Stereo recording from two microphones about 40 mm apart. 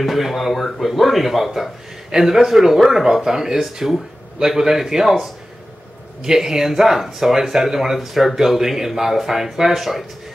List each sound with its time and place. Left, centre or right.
0.0 s speech: centre